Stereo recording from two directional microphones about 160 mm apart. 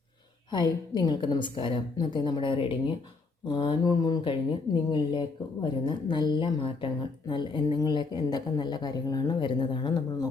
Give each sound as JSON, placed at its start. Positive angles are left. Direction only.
{"t": 0.5, "sound": "speech", "side_deg": 25}